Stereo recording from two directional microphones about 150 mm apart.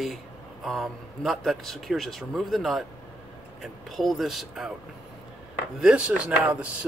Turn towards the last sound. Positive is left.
turn(degrees=-5)  # may be behind; listen again after turning